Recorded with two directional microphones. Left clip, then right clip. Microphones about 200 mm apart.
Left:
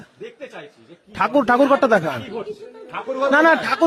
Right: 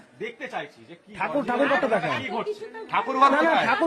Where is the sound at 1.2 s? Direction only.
50° left (ahead or behind).